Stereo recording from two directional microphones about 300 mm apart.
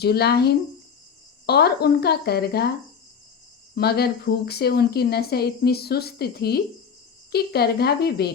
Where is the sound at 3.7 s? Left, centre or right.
Left.